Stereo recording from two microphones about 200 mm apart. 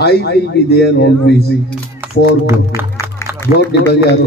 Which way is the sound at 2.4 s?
15° right (ahead or behind).